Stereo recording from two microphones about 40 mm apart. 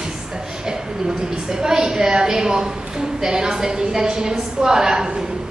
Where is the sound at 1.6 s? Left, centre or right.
Centre.